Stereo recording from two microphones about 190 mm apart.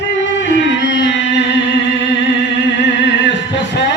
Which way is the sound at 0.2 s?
70° left (ahead or behind).